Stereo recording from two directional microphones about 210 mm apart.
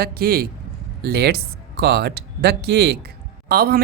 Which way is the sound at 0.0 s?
45° right (ahead or behind).